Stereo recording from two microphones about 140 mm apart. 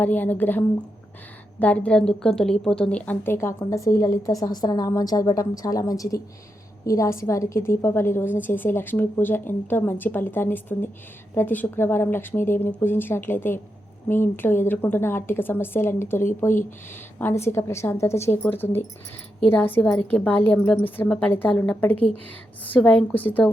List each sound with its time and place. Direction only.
0.0 s a woman's voice: 10° left (ahead or behind)